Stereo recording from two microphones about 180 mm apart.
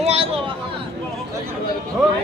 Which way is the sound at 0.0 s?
35° right (ahead or behind).